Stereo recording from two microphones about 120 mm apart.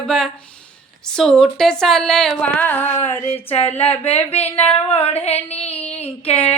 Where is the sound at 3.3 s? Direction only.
55° left (ahead or behind).